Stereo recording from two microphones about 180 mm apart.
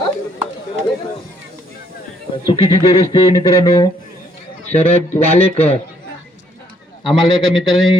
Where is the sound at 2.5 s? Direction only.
35° left (ahead or behind).